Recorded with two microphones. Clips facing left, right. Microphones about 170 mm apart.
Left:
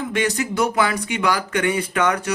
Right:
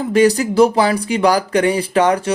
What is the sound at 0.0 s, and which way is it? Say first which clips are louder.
Speech: right 9 dB; 35° right (ahead or behind).